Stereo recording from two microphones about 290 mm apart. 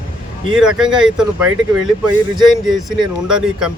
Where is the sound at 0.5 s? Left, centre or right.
Centre.